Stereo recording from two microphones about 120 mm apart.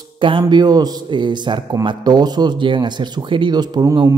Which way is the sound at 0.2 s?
45° right (ahead or behind).